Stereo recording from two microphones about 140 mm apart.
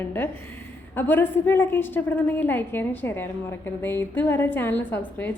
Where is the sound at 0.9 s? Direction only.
15° left (ahead or behind).